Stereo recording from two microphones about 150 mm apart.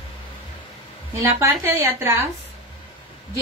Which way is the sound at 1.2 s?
20° right (ahead or behind).